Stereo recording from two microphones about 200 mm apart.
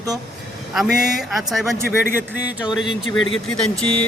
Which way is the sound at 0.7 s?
Centre (ahead or behind).